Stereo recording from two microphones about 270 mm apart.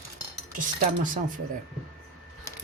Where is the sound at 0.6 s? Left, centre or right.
Right.